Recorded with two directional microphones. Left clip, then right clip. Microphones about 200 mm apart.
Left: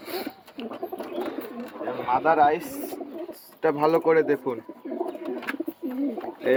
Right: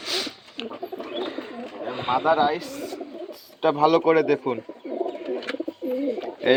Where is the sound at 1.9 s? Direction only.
5° right (ahead or behind).